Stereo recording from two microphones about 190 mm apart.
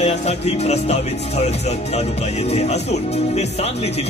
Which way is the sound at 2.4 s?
35° left (ahead or behind).